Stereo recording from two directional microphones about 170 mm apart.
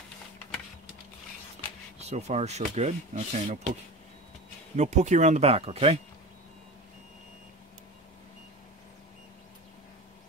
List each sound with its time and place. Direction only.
2.0 s speech: 40° right (ahead or behind)
4.7 s speech: 45° right (ahead or behind)